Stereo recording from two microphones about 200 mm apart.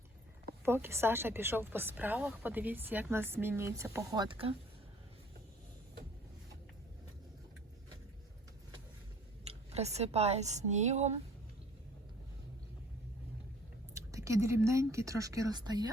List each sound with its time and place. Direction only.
0.6 s speech: 10° right (ahead or behind); by 4.5 s 25° right (ahead or behind)
9.4 s a woman's voice: 30° right (ahead or behind)
13.9 s a woman's voice: 15° right (ahead or behind)